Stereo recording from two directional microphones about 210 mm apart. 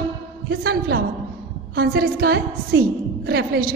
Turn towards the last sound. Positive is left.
turn(degrees=-50)  # may be behind; listen again after turning